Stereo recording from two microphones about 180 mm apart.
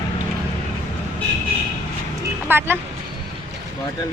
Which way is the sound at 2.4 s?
10° right (ahead or behind).